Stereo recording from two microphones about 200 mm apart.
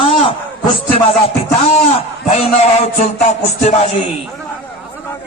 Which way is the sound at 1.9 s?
30° left (ahead or behind).